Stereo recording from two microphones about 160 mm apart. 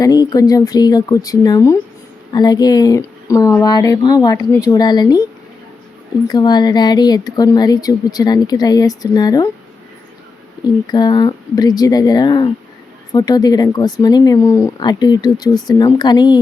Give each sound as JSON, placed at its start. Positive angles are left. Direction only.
{"t": 0.0, "sound": "speech", "side_deg": 25}
{"t": 6.2, "sound": "speech", "side_deg": 25}
{"t": 10.8, "sound": "speech", "side_deg": 25}